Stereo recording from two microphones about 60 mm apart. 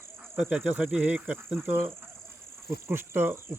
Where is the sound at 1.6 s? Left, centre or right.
Right.